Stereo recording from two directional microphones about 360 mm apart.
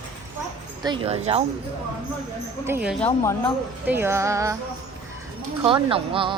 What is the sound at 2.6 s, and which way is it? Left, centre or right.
Speech, centre.